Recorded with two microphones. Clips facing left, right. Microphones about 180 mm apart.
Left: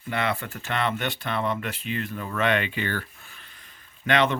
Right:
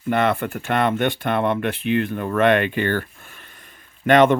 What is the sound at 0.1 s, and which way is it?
Speech, 55° right (ahead or behind).